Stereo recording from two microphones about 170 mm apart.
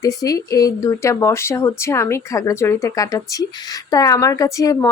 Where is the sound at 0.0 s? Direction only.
20° left (ahead or behind).